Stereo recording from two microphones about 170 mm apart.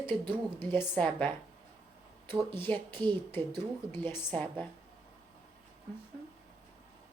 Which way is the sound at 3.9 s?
10° left (ahead or behind).